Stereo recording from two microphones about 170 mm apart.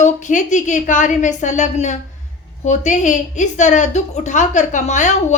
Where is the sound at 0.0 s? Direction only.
45° left (ahead or behind).